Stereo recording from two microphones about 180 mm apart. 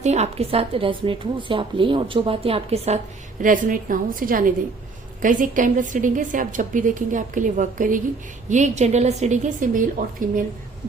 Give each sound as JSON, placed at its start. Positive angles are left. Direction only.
{"t": 0.0, "sound": "a woman's voice", "side_deg": -40}
{"t": 3.4, "sound": "a woman's voice", "side_deg": -50}